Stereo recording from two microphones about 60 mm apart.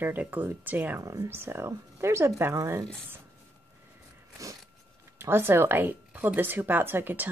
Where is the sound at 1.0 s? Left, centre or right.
Right.